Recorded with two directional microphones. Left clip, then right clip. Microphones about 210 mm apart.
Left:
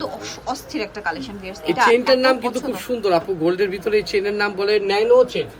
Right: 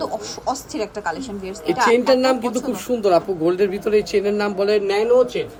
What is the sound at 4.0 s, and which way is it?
Speech, 55° right (ahead or behind).